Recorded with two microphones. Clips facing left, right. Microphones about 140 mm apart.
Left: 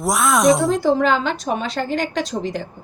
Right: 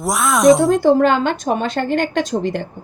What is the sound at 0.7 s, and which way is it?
A woman's voice, 50° right (ahead or behind).